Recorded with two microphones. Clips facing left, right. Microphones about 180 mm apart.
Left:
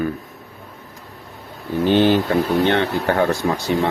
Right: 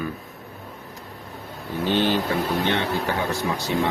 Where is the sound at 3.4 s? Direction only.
50° left (ahead or behind).